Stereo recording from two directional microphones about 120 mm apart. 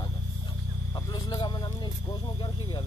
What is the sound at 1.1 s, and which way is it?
Vehicle, 40° left (ahead or behind).